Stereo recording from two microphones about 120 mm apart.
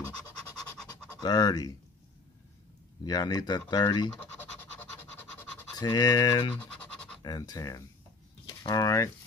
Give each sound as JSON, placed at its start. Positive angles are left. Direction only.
{"t": 1.2, "sound": "speech", "side_deg": 35}
{"t": 3.0, "sound": "speech", "side_deg": 35}
{"t": 5.8, "sound": "speech", "side_deg": 35}